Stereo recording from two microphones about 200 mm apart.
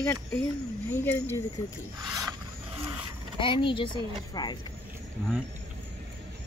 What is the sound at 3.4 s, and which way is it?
Speech, 25° left (ahead or behind).